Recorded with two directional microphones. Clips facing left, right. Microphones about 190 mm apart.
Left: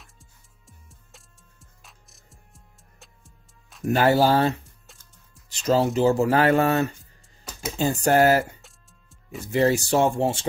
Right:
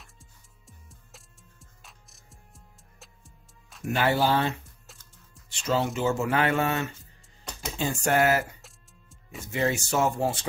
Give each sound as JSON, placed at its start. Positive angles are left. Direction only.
{"t": 0.0, "sound": "music", "side_deg": 0}
{"t": 3.8, "sound": "speech", "side_deg": 40}
{"t": 8.6, "sound": "music", "side_deg": 0}
{"t": 9.5, "sound": "speech", "side_deg": 35}